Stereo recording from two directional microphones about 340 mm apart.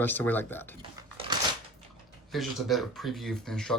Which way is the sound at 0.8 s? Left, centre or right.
Centre.